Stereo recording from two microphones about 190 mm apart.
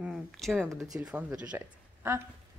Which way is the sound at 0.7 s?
15° right (ahead or behind).